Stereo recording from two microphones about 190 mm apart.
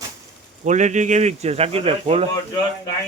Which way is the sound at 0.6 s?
40° right (ahead or behind).